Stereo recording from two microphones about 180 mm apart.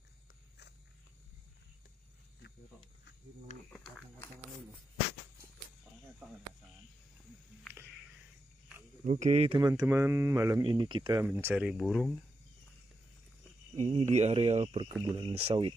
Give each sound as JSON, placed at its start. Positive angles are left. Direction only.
{"t": 3.5, "sound": "speech", "side_deg": 40}
{"t": 9.0, "sound": "speech", "side_deg": -40}
{"t": 9.6, "sound": "speech", "side_deg": -20}
{"t": 11.2, "sound": "speech", "side_deg": -10}
{"t": 13.7, "sound": "speech", "side_deg": -35}
{"t": 15.0, "sound": "speech", "side_deg": -25}